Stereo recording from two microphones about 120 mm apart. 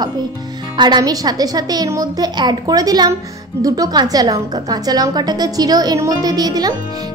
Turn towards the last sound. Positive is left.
turn(degrees=-35)  # may be behind; listen again after turning